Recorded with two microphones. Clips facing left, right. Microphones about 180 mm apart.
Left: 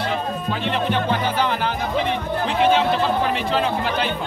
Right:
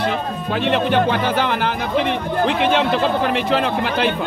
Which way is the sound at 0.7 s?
70° right (ahead or behind).